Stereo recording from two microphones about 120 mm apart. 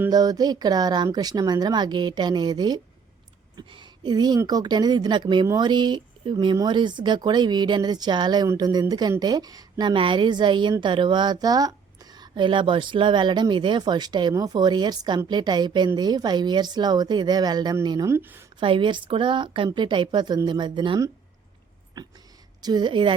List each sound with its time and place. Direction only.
0.1 s a woman's voice: 35° right (ahead or behind)
18.1 s a woman's voice: 20° right (ahead or behind)
18.6 s a woman's voice: 45° right (ahead or behind)